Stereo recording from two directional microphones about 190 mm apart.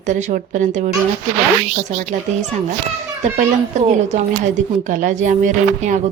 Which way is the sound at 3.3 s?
40° right (ahead or behind).